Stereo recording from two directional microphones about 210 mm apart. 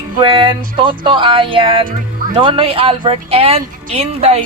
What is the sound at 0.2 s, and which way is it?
Speech, 25° right (ahead or behind).